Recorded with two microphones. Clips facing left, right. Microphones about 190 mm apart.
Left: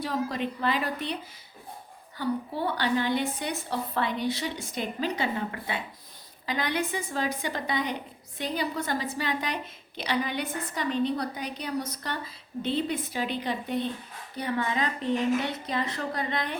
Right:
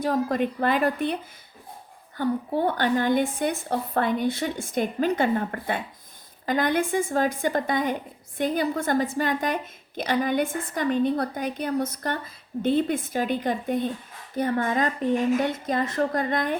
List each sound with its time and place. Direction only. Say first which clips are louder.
0.0 s a woman's voice: right 6 dB; 50° right (ahead or behind)
2.1 s a woman's voice: right 5 dB; 50° right (ahead or behind)